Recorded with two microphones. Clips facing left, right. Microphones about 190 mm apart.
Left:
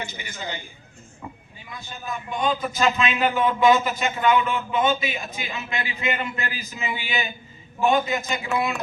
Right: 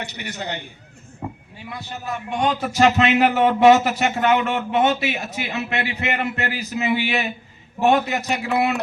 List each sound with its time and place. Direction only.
0.0 s a man's voice: 70° right (ahead or behind)
1.2 s a sound: 55° right (ahead or behind)
1.5 s a man's voice: 75° right (ahead or behind)